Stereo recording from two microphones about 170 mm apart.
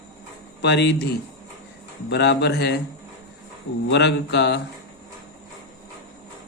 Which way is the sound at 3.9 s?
90° left.